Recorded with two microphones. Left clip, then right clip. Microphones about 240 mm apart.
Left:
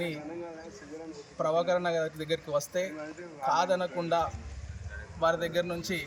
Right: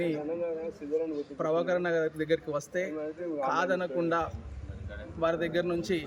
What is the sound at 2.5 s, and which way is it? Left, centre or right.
Speech, centre.